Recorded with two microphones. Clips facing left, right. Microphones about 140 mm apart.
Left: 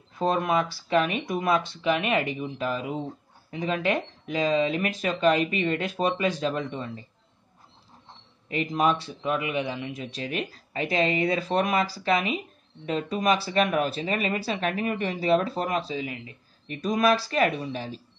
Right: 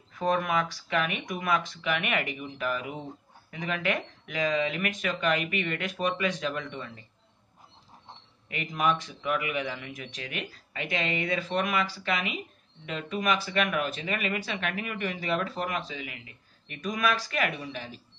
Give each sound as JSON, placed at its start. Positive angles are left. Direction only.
{"t": 0.2, "sound": "speech", "side_deg": 30}
{"t": 8.5, "sound": "speech", "side_deg": 30}